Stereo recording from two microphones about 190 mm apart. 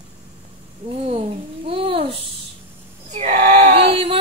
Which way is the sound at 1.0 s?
30° right (ahead or behind).